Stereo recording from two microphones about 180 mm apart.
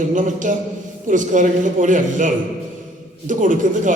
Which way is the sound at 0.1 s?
45° right (ahead or behind).